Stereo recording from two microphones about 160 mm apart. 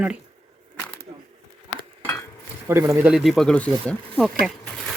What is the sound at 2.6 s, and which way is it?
Speech, 15° right (ahead or behind).